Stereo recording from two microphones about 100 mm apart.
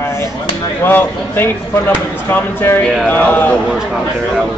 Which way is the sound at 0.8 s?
20° left (ahead or behind).